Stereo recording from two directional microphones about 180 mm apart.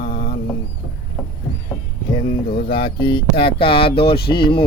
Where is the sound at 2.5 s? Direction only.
55° left (ahead or behind).